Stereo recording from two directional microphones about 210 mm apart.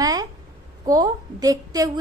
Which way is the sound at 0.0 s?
15° right (ahead or behind).